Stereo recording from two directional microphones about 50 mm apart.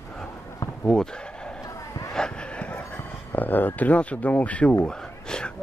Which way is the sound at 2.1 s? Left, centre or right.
Centre.